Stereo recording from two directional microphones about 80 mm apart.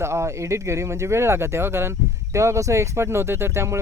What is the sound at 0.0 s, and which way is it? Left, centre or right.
Speech, right.